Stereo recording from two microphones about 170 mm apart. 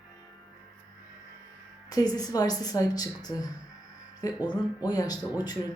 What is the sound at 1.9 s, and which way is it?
Speech, 20° left (ahead or behind).